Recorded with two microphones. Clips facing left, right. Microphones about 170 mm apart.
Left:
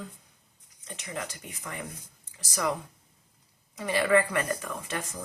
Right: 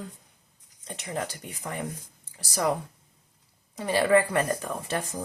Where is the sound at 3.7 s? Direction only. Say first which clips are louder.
Right 2 dB; 35° right (ahead or behind).